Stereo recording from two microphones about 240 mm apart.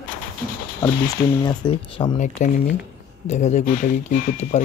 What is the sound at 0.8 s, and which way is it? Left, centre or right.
Speech, centre.